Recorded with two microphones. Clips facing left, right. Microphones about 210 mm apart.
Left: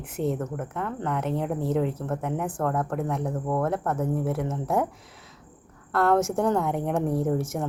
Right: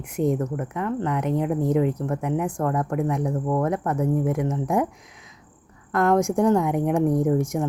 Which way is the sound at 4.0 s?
15° right (ahead or behind).